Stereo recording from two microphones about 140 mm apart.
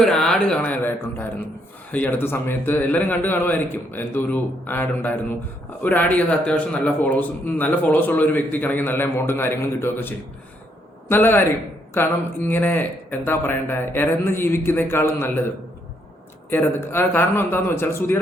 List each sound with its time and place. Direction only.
0.0 s a man's voice: 5° left (ahead or behind)
16.5 s a man's voice: 15° left (ahead or behind)